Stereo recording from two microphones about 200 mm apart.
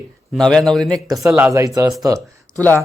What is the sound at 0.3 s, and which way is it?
Speech, 5° left (ahead or behind).